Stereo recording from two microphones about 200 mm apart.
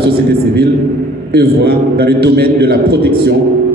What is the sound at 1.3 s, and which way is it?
A man's voice, 55° right (ahead or behind).